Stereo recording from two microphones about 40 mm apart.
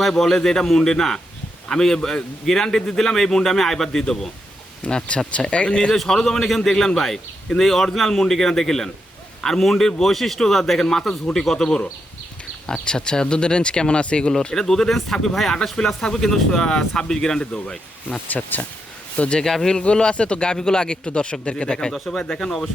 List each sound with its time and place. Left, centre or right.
0.1 s a man's voice: centre
4.8 s speech: left
5.9 s a man's voice: centre
14.3 s a man's voice: centre
18.3 s speech: left
19.1 s speech: left
19.4 s a man's voice: centre
19.8 s speech: left